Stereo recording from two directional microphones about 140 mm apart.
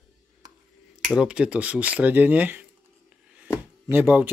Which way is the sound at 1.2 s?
10° right (ahead or behind).